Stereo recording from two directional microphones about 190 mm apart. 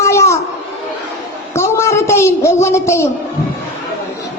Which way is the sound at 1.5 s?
15° left (ahead or behind).